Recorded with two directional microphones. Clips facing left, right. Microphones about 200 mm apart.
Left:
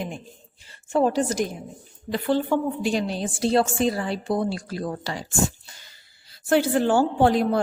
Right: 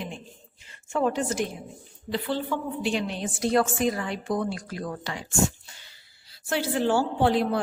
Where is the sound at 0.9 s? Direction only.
35° left (ahead or behind).